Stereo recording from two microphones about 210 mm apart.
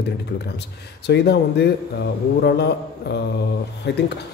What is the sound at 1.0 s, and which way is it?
Speech, 50° left (ahead or behind).